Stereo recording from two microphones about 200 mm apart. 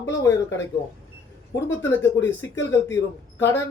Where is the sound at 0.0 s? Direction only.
15° left (ahead or behind).